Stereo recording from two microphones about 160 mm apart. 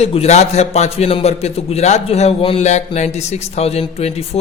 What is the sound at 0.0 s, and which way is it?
Speech, 40° left (ahead or behind).